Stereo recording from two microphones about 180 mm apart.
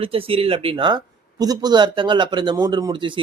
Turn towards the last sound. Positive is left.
turn(degrees=-25)  # may be behind; listen again after turning